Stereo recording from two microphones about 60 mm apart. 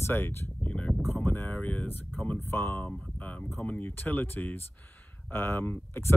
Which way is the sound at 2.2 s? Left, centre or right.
Left.